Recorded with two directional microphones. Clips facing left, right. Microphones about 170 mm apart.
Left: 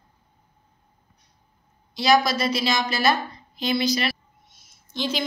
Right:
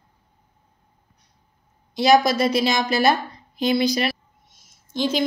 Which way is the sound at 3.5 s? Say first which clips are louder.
Right 3 dB; 50° right (ahead or behind).